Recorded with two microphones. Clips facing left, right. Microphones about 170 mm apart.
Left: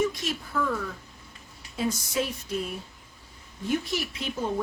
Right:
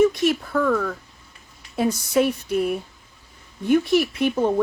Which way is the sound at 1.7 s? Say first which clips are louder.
Right 8 dB; 60° right (ahead or behind).